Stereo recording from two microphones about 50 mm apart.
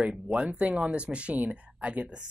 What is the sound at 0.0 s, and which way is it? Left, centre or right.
Speech, right.